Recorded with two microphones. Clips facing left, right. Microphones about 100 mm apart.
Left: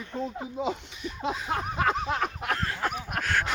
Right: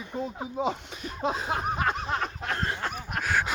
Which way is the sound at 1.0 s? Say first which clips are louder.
Right 2 dB; 40° right (ahead or behind).